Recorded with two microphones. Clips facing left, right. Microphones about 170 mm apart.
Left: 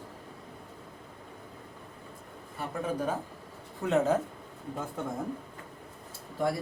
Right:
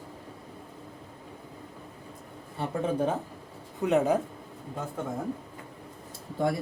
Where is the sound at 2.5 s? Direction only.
25° right (ahead or behind).